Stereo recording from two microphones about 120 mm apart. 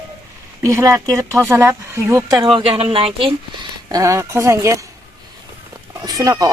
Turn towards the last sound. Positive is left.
turn(degrees=-30)  # may be behind; listen again after turning